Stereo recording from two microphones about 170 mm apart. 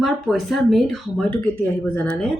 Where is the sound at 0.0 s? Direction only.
Centre (ahead or behind).